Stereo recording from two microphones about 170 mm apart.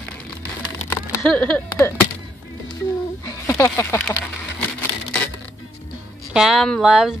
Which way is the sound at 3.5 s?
15° left (ahead or behind).